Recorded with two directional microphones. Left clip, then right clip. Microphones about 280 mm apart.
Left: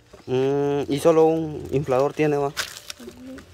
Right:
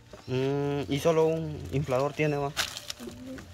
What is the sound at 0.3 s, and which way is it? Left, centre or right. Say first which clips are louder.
Speech: left 8 dB; centre.